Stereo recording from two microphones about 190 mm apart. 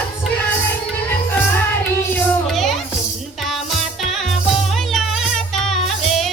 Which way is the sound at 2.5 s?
Centre (ahead or behind).